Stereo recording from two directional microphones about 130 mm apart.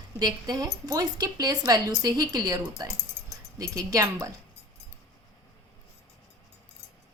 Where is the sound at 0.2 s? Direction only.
30° right (ahead or behind).